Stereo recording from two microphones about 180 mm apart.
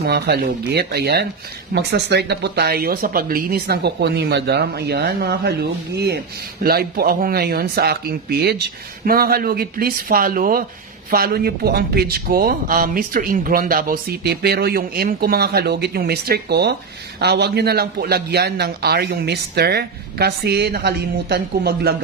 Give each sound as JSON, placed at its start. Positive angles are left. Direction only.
{"t": 0.0, "sound": "speech", "side_deg": -60}